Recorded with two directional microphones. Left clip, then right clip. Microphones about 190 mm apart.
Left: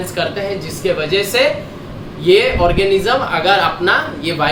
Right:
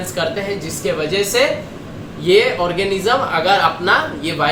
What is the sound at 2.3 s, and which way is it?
Speech, 15° left (ahead or behind).